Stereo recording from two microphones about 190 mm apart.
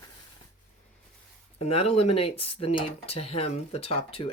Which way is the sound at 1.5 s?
30° left (ahead or behind).